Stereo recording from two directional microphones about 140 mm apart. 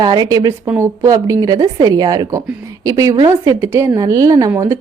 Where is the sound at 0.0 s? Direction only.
30° right (ahead or behind).